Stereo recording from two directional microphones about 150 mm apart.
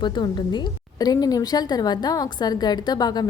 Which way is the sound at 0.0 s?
30° left (ahead or behind).